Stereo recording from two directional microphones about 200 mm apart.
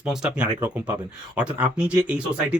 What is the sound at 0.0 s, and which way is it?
Speech, 5° right (ahead or behind).